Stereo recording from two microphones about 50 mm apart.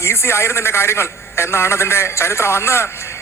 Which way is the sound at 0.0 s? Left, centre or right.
Left.